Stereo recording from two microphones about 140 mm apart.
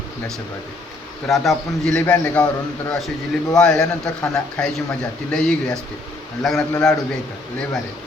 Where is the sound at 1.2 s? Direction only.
Centre (ahead or behind).